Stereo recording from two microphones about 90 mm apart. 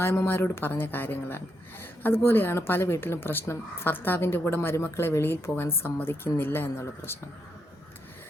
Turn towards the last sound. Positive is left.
turn(degrees=25)  # may be behind; listen again after turning